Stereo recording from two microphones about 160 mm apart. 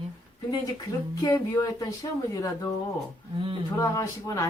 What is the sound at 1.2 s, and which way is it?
A man's voice, 25° left (ahead or behind).